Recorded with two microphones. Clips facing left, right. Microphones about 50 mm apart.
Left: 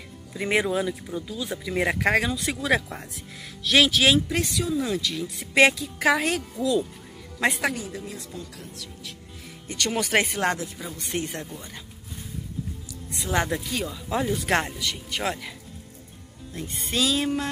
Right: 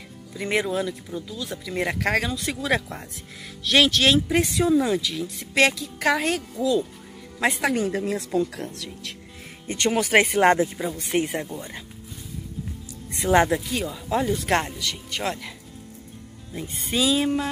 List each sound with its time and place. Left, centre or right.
0.3 s speech: centre
4.5 s speech: right
4.7 s speech: centre
5.5 s speech: centre
7.7 s a woman's voice: right
8.5 s a woman's voice: right
9.8 s speech: centre
10.4 s speech: right
13.1 s speech: right
13.5 s speech: centre
16.5 s speech: centre